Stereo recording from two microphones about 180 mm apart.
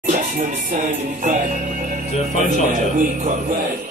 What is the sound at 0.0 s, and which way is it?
Speech, 45° right (ahead or behind).